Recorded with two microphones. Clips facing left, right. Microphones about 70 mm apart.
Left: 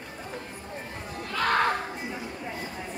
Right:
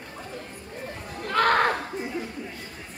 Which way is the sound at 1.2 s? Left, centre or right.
Right.